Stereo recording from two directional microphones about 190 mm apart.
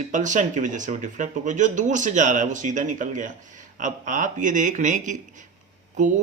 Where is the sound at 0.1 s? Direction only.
40° right (ahead or behind).